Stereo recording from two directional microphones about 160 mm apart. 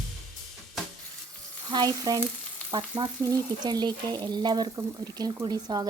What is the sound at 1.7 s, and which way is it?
Frying, 25° right (ahead or behind).